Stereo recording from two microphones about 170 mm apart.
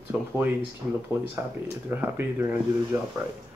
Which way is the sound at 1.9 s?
15° right (ahead or behind).